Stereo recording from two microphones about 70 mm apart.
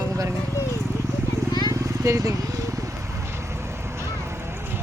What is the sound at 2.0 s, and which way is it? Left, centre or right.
Speech, right.